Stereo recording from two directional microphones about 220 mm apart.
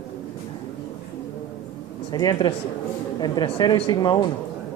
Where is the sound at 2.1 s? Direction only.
20° left (ahead or behind).